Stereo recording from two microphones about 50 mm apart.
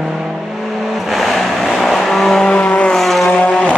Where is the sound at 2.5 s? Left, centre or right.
Left.